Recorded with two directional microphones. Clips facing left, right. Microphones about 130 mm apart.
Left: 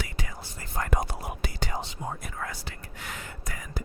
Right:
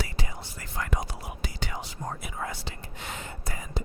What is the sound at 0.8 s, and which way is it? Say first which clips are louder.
Whispering: left 3 dB; 50° left (ahead or behind).